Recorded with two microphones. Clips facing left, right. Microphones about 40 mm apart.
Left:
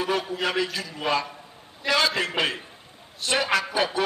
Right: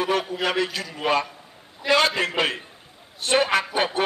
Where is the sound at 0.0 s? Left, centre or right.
Right.